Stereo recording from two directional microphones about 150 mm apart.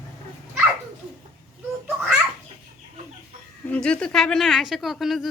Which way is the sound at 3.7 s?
5° left (ahead or behind).